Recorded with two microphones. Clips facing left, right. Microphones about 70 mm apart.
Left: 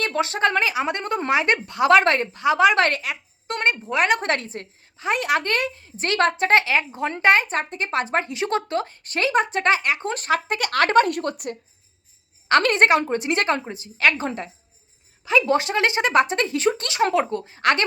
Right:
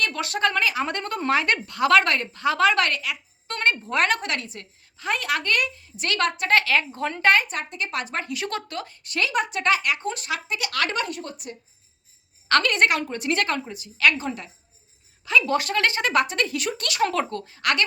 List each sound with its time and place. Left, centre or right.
0.0 s a woman's voice: left
2.4 s a woman's voice: centre
2.8 s a sound: left
3.8 s a woman's voice: centre
4.2 s a woman's voice: left
10.1 s a woman's voice: left
12.6 s a woman's voice: left